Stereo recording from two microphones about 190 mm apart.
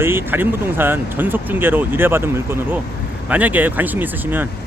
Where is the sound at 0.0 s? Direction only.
10° right (ahead or behind).